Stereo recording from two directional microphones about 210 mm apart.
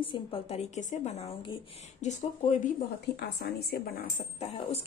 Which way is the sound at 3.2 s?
45° left (ahead or behind).